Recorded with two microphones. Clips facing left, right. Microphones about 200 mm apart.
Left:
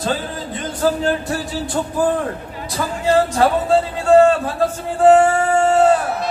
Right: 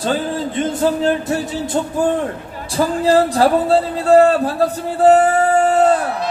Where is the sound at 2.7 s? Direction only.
35° right (ahead or behind).